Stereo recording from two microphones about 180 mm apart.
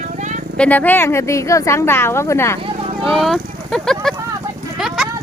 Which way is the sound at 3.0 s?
Centre (ahead or behind).